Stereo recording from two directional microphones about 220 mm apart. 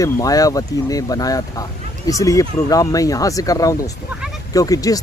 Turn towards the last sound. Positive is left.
turn(degrees=15)  # may be behind; listen again after turning